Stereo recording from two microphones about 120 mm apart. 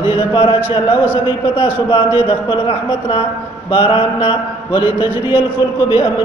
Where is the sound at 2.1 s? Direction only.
45° left (ahead or behind).